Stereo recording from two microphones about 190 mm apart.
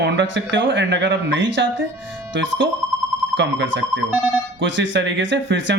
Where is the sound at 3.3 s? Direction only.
70° right (ahead or behind).